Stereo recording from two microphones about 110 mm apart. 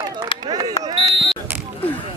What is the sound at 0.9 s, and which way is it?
Fire alarm, 40° right (ahead or behind).